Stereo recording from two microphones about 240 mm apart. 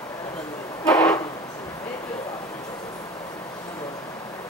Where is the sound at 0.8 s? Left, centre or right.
Centre.